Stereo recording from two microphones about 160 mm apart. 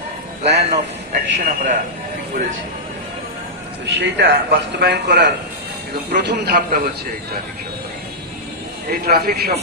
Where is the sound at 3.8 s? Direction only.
90° right.